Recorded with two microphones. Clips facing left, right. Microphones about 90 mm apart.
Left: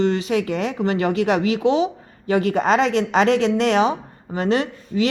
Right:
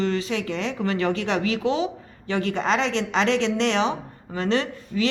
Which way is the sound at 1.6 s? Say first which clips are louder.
Left 7 dB; 30° left (ahead or behind).